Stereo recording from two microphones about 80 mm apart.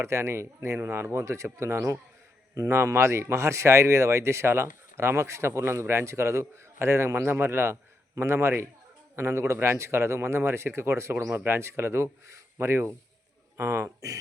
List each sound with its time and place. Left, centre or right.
0.0 s speech: right